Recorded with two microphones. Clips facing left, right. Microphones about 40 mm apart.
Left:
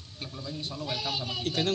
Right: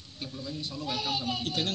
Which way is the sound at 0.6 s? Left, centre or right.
Left.